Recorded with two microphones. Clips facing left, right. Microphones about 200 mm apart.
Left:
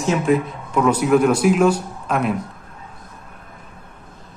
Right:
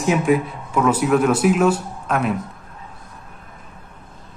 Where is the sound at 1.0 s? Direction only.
5° left (ahead or behind).